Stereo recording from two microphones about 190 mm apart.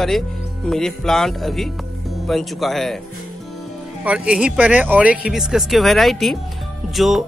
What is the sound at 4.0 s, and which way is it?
Speech, 5° right (ahead or behind).